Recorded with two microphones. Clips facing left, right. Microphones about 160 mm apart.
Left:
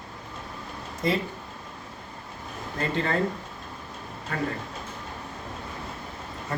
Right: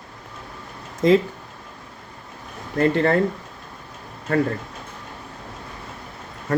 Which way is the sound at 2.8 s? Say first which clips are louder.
Right 9 dB; 60° right (ahead or behind).